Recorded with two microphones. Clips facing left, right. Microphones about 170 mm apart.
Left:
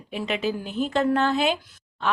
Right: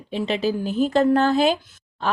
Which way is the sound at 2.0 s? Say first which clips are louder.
Right 1 dB; 35° right (ahead or behind).